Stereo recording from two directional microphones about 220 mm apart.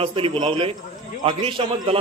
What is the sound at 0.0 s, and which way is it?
Speech, 25° right (ahead or behind).